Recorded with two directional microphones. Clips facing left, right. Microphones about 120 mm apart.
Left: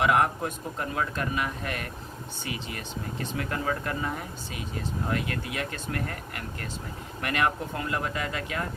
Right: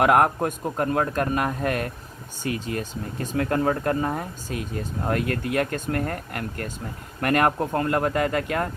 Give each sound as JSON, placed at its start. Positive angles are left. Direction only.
{"t": 0.0, "sound": "speech", "side_deg": -50}